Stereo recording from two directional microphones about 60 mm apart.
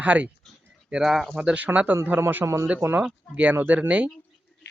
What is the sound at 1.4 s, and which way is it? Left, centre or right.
Speech, centre.